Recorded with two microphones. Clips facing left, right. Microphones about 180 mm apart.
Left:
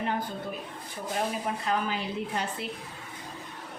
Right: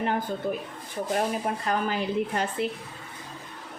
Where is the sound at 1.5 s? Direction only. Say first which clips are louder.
Right 2 dB; 50° right (ahead or behind).